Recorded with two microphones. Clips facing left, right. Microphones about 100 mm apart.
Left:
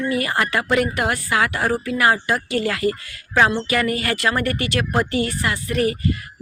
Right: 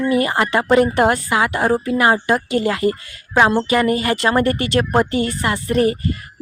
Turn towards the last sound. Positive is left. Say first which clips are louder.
# right 4 dB
turn(degrees=-30)  # may be behind; listen again after turning